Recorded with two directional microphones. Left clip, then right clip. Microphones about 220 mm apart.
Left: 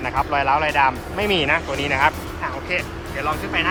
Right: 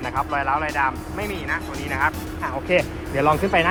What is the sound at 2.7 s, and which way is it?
Speech, 20° right (ahead or behind).